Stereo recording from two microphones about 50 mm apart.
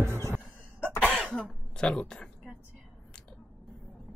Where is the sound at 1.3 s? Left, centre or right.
Centre.